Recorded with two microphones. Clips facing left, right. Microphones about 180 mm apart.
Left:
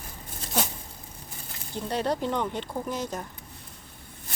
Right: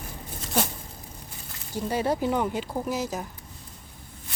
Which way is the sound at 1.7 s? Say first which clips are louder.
Right 2 dB; 5° right (ahead or behind).